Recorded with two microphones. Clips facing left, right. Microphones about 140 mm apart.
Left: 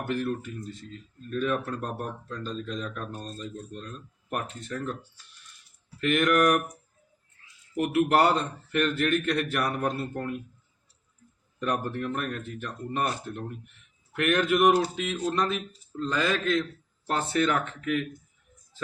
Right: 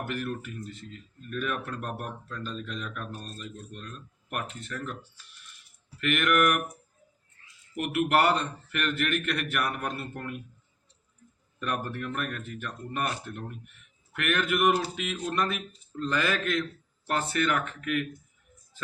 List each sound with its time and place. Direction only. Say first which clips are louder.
0.1 s a man's voice: left 4 dB; 30° left (ahead or behind)
6.0 s speech: left 2 dB; 35° left (ahead or behind)
7.9 s speech: left 2 dB; 35° left (ahead or behind)
11.6 s a man's voice: left 3 dB; 30° left (ahead or behind)